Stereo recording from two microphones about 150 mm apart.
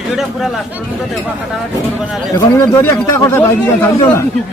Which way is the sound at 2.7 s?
20° left (ahead or behind).